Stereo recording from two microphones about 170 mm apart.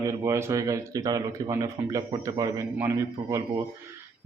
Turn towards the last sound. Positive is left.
turn(degrees=-15)  # may be behind; listen again after turning